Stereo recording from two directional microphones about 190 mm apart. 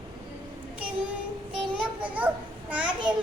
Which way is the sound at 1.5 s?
5° right (ahead or behind).